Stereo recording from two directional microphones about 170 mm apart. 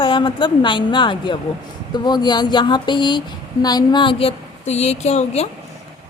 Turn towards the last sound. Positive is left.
turn(degrees=40)  # may be behind; listen again after turning